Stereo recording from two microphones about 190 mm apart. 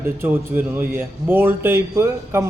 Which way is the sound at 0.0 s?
10° right (ahead or behind).